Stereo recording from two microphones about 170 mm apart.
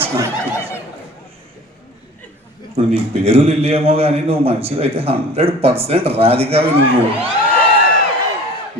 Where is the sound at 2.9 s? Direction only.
35° right (ahead or behind).